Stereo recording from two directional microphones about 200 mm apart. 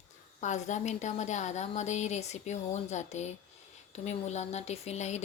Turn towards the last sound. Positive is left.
turn(degrees=35)  # may be behind; listen again after turning